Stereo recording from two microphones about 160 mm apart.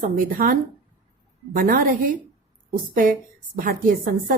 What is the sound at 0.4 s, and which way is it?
Speech, 65° right (ahead or behind).